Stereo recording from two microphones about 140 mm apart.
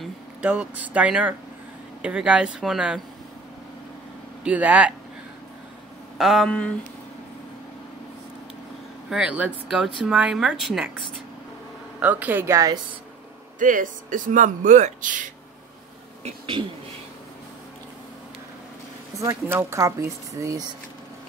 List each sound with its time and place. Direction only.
0.0 s speech: 10° right (ahead or behind)
4.5 s speech: 10° right (ahead or behind)
6.1 s speech: centre (ahead or behind)
9.1 s speech: 10° right (ahead or behind); by 12.8 s 25° right (ahead or behind)
13.6 s speech: 70° right (ahead or behind)
16.3 s speech: 40° right (ahead or behind)
19.1 s speech: 20° right (ahead or behind)